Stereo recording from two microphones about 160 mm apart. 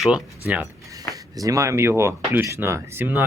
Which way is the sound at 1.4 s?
20° right (ahead or behind).